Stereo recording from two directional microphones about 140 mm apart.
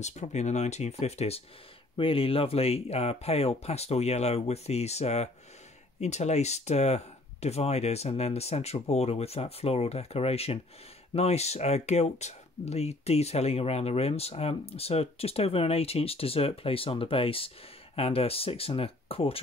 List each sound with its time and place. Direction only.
0.0 s speech: 55° left (ahead or behind)